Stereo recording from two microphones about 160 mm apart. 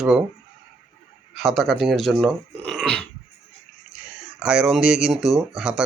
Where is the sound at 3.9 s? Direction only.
5° right (ahead or behind).